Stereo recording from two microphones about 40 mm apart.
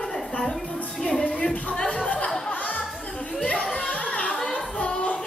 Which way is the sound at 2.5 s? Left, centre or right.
Left.